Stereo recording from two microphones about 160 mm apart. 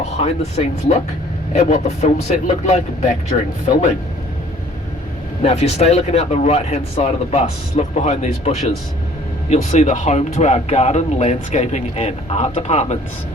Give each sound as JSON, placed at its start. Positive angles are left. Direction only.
{"t": 0.2, "sound": "speech", "side_deg": 40}
{"t": 5.4, "sound": "speech", "side_deg": 40}